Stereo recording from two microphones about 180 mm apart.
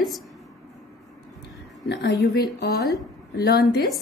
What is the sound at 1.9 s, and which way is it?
Music, 75° left (ahead or behind).